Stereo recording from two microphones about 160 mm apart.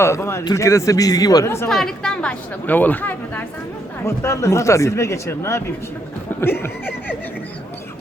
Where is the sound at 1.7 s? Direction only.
Centre (ahead or behind).